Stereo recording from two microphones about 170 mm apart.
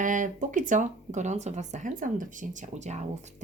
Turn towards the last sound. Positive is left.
turn(degrees=-45)  # may be behind; listen again after turning